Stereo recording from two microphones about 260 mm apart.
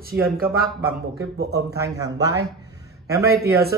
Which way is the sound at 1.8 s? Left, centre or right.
Centre.